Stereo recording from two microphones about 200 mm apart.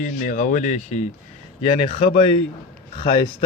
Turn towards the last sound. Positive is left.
turn(degrees=25)  # may be behind; listen again after turning